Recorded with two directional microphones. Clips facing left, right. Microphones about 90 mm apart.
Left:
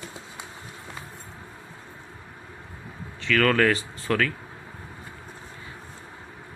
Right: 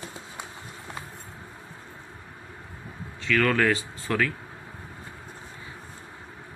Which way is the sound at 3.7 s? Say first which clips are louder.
Left 2 dB; 15° right (ahead or behind).